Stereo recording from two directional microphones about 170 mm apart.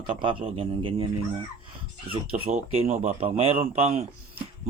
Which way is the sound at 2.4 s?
40° right (ahead or behind).